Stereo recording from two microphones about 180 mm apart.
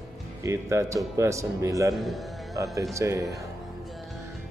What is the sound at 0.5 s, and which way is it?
A man's voice, 15° right (ahead or behind).